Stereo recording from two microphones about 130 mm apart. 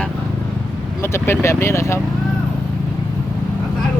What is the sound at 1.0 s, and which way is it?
Speech, 20° left (ahead or behind).